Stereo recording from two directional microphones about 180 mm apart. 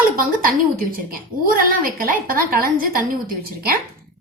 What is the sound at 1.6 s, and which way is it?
A woman's voice, 50° right (ahead or behind).